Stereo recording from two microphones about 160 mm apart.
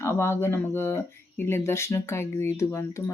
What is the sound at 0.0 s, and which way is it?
Speech, 15° left (ahead or behind).